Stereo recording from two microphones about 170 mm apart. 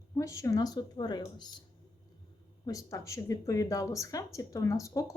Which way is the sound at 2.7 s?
20° left (ahead or behind).